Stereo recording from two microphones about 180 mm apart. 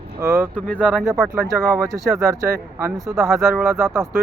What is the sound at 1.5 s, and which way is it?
Speech, 15° right (ahead or behind).